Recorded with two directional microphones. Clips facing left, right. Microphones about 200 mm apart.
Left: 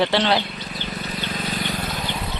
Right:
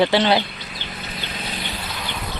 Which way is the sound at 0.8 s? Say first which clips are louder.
Left 4 dB; 45° left (ahead or behind).